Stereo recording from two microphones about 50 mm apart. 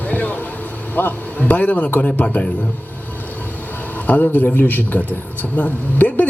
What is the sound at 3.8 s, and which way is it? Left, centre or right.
A man's voice, left.